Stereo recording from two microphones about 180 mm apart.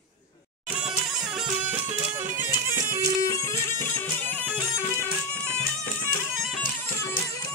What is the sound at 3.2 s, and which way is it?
Music, 15° left (ahead or behind).